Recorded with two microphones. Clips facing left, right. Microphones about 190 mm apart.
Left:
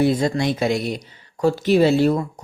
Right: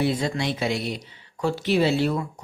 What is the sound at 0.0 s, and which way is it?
Speech, 45° left (ahead or behind).